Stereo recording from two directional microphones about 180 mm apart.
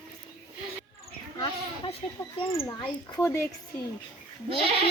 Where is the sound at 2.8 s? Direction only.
25° left (ahead or behind).